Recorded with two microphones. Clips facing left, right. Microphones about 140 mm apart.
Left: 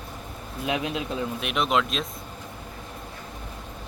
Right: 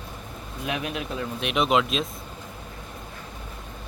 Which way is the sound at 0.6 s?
20° left (ahead or behind).